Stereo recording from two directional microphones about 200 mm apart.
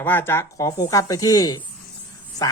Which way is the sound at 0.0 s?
10° left (ahead or behind).